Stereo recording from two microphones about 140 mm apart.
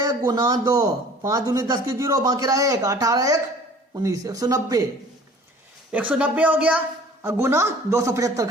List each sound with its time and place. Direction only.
0.0 s speech: 25° right (ahead or behind)
5.9 s a man's voice: 10° right (ahead or behind)